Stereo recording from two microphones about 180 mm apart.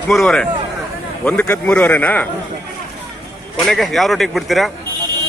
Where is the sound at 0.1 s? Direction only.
5° left (ahead or behind).